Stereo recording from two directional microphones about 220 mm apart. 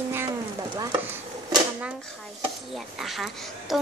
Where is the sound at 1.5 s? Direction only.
5° right (ahead or behind).